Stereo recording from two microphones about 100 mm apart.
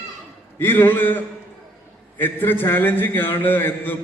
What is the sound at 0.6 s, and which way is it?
A man's voice, 20° left (ahead or behind).